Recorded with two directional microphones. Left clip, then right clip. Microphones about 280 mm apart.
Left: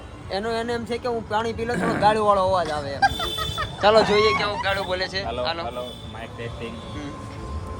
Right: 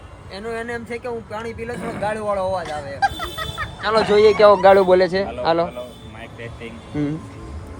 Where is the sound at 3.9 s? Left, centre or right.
Centre.